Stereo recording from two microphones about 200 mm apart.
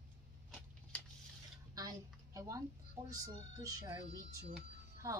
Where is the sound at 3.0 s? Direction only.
20° right (ahead or behind).